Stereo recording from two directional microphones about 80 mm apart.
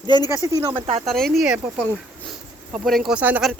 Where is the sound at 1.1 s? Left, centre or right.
Centre.